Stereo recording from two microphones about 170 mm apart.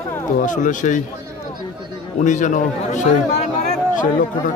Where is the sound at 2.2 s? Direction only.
45° left (ahead or behind).